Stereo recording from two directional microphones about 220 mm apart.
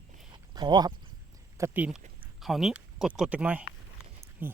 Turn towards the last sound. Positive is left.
turn(degrees=-10)  # may be behind; listen again after turning